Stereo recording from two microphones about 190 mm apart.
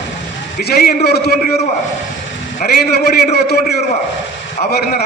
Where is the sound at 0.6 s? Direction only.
55° left (ahead or behind).